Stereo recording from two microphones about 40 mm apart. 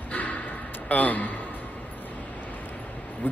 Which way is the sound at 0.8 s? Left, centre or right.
Left.